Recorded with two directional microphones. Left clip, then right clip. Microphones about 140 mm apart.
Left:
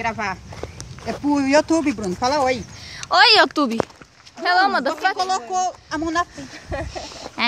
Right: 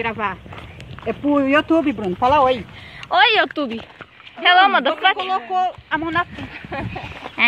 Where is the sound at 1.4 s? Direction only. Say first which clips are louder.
Even; 40° left (ahead or behind).